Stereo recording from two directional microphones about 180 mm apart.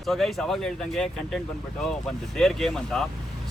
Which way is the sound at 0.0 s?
Centre (ahead or behind).